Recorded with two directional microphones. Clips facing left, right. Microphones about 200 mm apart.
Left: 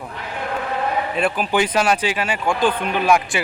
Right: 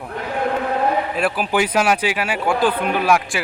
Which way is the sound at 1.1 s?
5° right (ahead or behind).